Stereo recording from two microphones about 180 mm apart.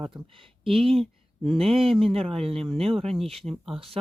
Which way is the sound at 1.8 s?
30° right (ahead or behind).